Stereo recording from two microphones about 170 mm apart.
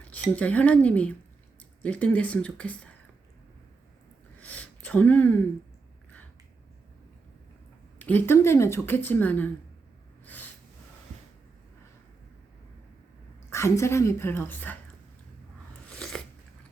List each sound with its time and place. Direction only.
0.0 s speech: 10° left (ahead or behind)
4.4 s a sound: 10° left (ahead or behind)
7.9 s speech: 10° left (ahead or behind)
10.2 s a sound: 10° left (ahead or behind)
13.5 s speech: 15° left (ahead or behind)
15.9 s biting: 5° left (ahead or behind)